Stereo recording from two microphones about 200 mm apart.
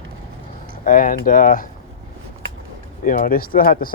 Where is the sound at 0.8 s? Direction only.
45° left (ahead or behind).